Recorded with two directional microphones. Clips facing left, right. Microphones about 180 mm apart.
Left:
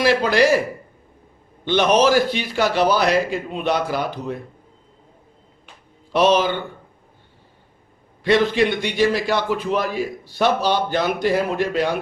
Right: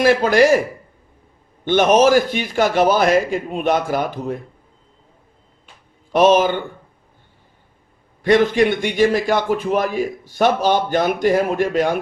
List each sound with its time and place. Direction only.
0.0 s a man's voice: 50° right (ahead or behind)
1.6 s a man's voice: 50° right (ahead or behind)
6.1 s a man's voice: 50° right (ahead or behind)
8.2 s a man's voice: 50° right (ahead or behind)